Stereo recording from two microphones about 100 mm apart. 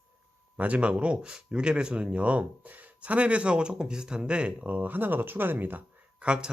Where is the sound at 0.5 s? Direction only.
15° right (ahead or behind).